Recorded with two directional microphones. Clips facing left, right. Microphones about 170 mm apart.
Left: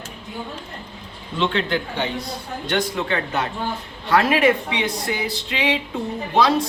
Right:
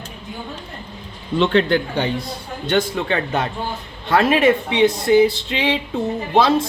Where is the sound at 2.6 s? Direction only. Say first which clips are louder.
Right 4 dB; 25° right (ahead or behind).